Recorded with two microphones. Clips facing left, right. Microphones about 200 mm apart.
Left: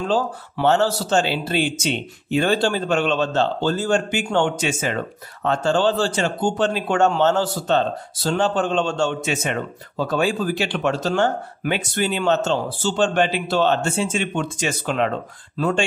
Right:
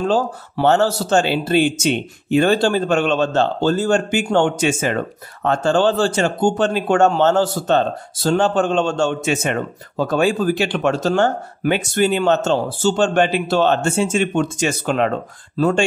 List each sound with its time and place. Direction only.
0.1 s a man's voice: 45° right (ahead or behind)